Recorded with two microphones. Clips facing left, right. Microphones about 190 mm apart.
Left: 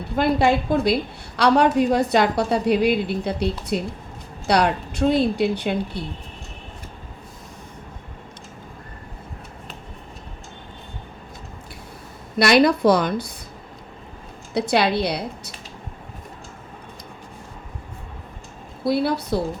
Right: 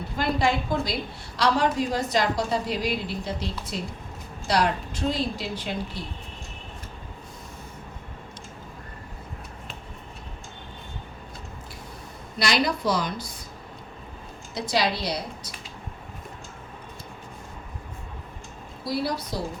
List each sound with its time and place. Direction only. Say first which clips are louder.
0.2 s a woman's voice: left 6 dB; 60° left (ahead or behind)
12.4 s a woman's voice: left 9 dB; 60° left (ahead or behind)
14.5 s a woman's voice: left 6 dB; 60° left (ahead or behind)
18.9 s a woman's voice: left 7 dB; 60° left (ahead or behind)